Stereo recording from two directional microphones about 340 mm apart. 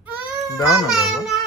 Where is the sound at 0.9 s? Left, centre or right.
Centre.